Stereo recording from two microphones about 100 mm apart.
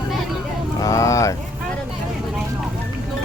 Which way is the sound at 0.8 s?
30° left (ahead or behind).